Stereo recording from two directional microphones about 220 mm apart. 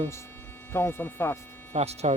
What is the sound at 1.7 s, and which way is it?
Speech, 30° right (ahead or behind).